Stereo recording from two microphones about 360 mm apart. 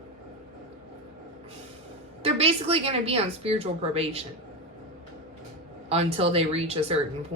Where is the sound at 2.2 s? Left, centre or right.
Centre.